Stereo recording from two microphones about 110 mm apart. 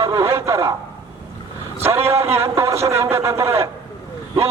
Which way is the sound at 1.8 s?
20° right (ahead or behind).